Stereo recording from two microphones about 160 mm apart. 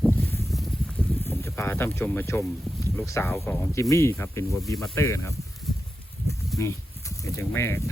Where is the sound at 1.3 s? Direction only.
15° left (ahead or behind).